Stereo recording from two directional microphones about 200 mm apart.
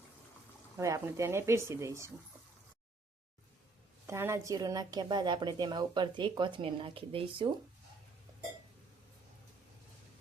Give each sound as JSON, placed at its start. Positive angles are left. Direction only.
{"t": 0.8, "sound": "speech", "side_deg": -15}
{"t": 4.0, "sound": "a woman's voice", "side_deg": -15}